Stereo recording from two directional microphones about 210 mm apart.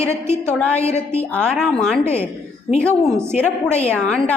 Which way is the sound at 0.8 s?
30° left (ahead or behind).